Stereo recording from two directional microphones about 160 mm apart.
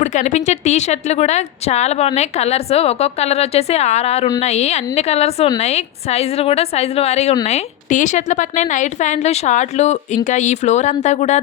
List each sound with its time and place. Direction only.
0.0 s a woman's voice: 50° left (ahead or behind)